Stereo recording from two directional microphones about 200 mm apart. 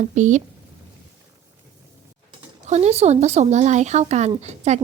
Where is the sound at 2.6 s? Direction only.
35° right (ahead or behind).